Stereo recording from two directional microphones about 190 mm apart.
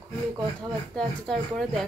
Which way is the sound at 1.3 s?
Centre (ahead or behind).